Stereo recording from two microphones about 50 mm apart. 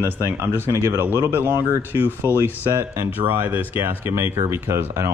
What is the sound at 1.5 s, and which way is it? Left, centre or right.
Speech, right.